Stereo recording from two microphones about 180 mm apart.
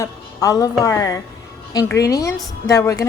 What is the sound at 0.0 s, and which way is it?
A woman's voice, 20° left (ahead or behind).